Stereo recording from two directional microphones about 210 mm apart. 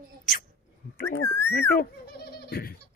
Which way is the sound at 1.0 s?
10° left (ahead or behind).